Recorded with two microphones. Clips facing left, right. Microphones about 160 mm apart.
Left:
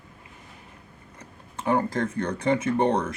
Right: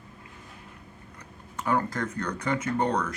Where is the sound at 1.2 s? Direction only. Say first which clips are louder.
Left 1 dB; 25° left (ahead or behind).